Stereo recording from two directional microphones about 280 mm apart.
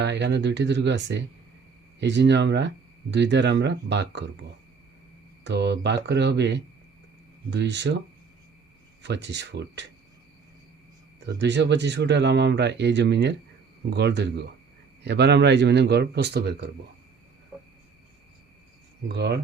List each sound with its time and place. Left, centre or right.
0.0 s speech: right
5.4 s speech: right
9.0 s speech: right
11.3 s speech: right
19.1 s speech: right